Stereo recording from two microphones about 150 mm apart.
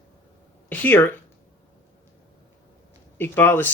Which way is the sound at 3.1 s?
15° left (ahead or behind).